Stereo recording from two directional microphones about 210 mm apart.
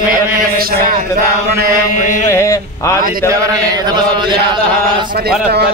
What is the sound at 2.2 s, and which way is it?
Speech, 15° left (ahead or behind).